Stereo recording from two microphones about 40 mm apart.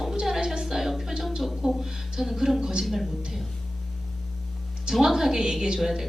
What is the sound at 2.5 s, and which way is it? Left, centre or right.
Speech, centre.